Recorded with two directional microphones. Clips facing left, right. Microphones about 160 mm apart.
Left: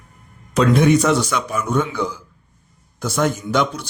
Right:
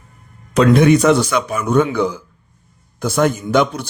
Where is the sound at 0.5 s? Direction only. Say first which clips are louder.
Right 3 dB; 70° right (ahead or behind).